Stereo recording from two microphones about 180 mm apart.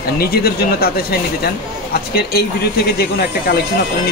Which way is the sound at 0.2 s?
60° left (ahead or behind).